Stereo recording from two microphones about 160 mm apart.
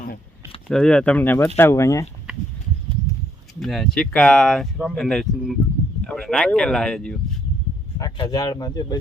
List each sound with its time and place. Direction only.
0.7 s speech: 5° left (ahead or behind)
3.6 s speech: centre (ahead or behind)
7.9 s speech: 25° left (ahead or behind)